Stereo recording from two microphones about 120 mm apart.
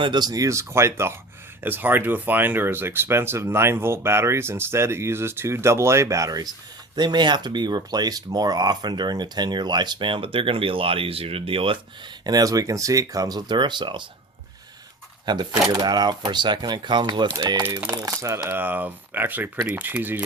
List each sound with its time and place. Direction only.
0.0 s speech: 35° right (ahead or behind)
12.2 s speech: 30° right (ahead or behind)
15.3 s speech: 35° right (ahead or behind); by 20.2 s 15° right (ahead or behind)